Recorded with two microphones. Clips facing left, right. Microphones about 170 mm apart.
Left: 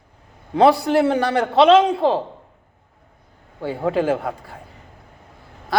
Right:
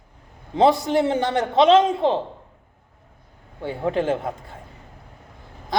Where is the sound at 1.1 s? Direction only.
75° left (ahead or behind).